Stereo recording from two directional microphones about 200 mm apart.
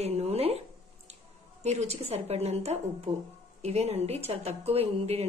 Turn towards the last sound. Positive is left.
turn(degrees=-30)  # may be behind; listen again after turning